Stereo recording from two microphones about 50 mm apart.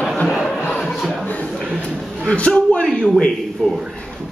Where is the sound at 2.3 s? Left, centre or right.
Left.